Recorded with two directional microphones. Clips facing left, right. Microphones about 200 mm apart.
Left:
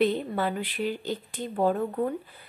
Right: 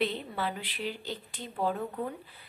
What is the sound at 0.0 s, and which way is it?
A woman's voice, 50° left (ahead or behind).